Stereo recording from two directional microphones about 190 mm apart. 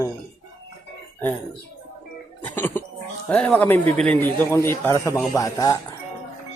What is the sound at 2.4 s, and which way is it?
A man's voice, 10° left (ahead or behind).